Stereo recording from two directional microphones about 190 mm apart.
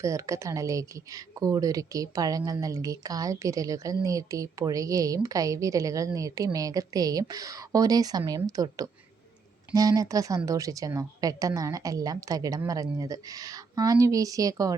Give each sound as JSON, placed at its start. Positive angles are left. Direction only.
{"t": 0.0, "sound": "speech", "side_deg": -15}